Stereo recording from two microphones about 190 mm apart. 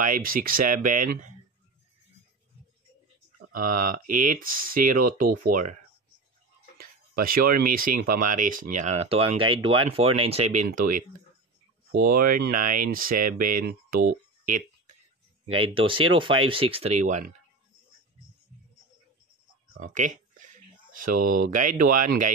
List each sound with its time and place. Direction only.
0.0 s speech: 45° right (ahead or behind)
3.5 s speech: 50° right (ahead or behind)
6.8 s speech: 50° right (ahead or behind)
15.5 s speech: 30° right (ahead or behind)
19.9 s speech: 40° right (ahead or behind)